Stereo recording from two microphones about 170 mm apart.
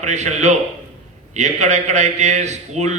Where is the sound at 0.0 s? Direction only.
40° right (ahead or behind).